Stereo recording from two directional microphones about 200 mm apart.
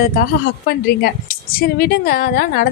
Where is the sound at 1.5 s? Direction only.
50° left (ahead or behind).